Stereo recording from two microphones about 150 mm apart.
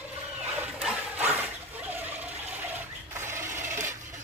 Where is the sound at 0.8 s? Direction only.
5° right (ahead or behind).